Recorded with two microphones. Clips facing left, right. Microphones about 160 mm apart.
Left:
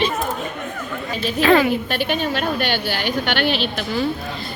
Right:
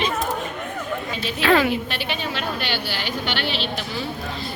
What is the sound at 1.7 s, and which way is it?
A woman's voice, 45° left (ahead or behind).